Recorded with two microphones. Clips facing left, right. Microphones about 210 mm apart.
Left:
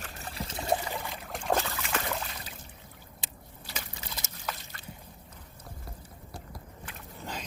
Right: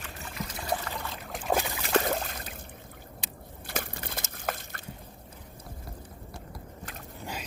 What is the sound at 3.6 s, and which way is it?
Crushing, 55° right (ahead or behind).